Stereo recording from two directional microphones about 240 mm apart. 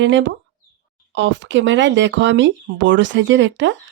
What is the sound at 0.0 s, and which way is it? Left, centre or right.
Speech, right.